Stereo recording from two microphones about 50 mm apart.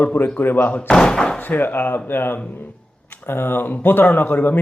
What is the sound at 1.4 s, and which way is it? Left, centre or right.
Speech, left.